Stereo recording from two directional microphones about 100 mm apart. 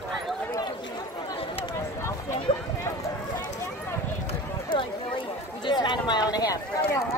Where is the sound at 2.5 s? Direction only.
65° left (ahead or behind).